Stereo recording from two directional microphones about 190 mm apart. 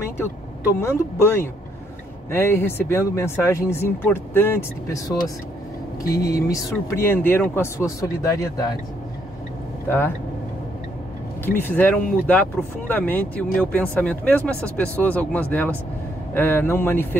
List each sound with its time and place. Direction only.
0.7 s speech: 15° left (ahead or behind)
6.1 s speech: 15° left (ahead or behind)
9.8 s speech: 10° left (ahead or behind)
11.4 s speech: 10° left (ahead or behind)